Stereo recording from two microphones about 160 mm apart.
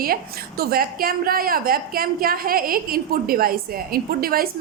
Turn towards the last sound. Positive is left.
turn(degrees=-65)  # may be behind; listen again after turning